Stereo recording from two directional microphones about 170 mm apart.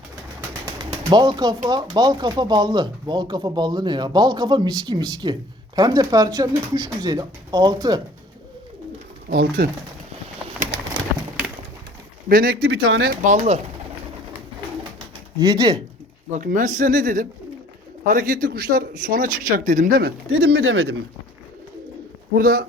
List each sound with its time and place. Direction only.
0.6 s speech: 25° right (ahead or behind)
9.3 s speech: 65° right (ahead or behind)
10.9 s pigeon: 10° right (ahead or behind)
12.3 s speech: 60° right (ahead or behind)
13.2 s speech: 40° right (ahead or behind)
15.4 s speech: 20° right (ahead or behind)
16.3 s speech: 50° right (ahead or behind); by 20.9 s 75° right (ahead or behind)
22.4 s speech: 60° right (ahead or behind)